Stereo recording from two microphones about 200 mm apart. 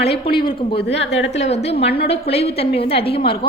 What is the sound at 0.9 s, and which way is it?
Speech, 65° left (ahead or behind).